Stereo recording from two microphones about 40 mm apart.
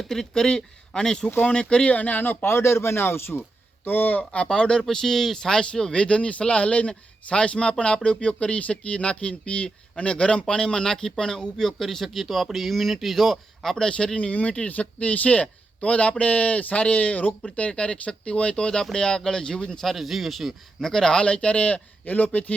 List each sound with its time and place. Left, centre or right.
0.0 s speech: centre
1.9 s speech: left
2.2 s speech: left
2.5 s a man's voice: left
3.8 s speech: left
4.2 s speech: left
4.9 s speech: centre
13.8 s speech: left
17.7 s speech: left
19.8 s speech: centre
20.8 s speech: centre; by 22.5 s left